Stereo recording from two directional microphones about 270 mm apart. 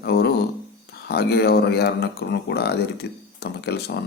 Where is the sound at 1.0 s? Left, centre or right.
Left.